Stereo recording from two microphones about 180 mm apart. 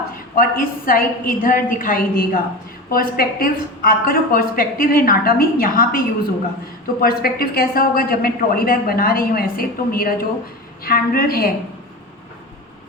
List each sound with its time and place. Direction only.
0.3 s a woman's voice: 50° left (ahead or behind)
7.0 s a woman's voice: 55° left (ahead or behind)